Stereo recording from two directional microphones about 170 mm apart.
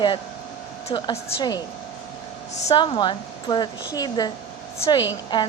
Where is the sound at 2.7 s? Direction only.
30° left (ahead or behind).